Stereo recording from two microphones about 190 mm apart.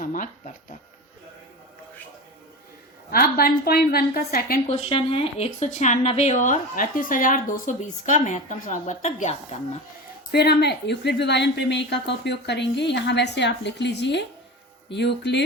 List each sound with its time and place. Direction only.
0.0 s a woman's voice: 45° left (ahead or behind)
3.1 s a woman's voice: 50° left (ahead or behind)
4.7 s speech: 30° left (ahead or behind)
10.3 s a woman's voice: 60° left (ahead or behind)